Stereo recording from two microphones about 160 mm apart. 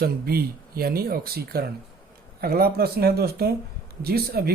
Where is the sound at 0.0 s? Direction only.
70° right (ahead or behind).